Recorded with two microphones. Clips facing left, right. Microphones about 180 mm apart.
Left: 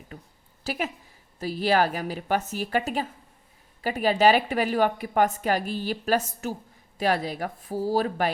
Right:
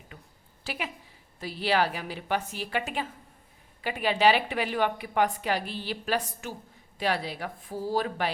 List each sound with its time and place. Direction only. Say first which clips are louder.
0.6 s a woman's voice: left 5 dB; 40° left (ahead or behind)